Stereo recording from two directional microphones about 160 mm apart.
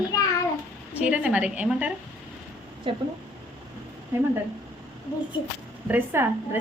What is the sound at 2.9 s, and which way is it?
Speech, 30° right (ahead or behind).